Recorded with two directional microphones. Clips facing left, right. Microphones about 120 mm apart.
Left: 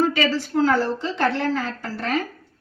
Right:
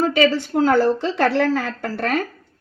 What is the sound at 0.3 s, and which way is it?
Speech, 55° right (ahead or behind).